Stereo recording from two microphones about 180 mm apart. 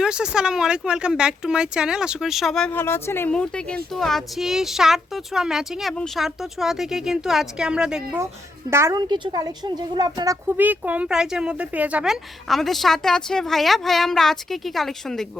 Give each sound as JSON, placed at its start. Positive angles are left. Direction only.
{"t": 0.0, "sound": "speech", "side_deg": -5}
{"t": 8.7, "sound": "a woman's voice", "side_deg": -15}
{"t": 10.6, "sound": "speech", "side_deg": -10}